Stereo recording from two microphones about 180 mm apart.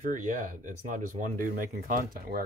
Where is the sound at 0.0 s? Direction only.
50° right (ahead or behind).